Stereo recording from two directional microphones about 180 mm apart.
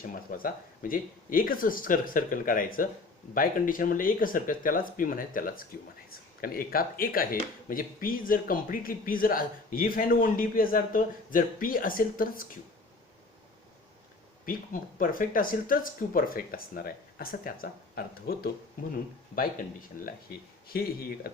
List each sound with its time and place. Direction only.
0.0 s speech: 50° left (ahead or behind)
14.4 s speech: 50° left (ahead or behind)
19.9 s speech: 50° left (ahead or behind)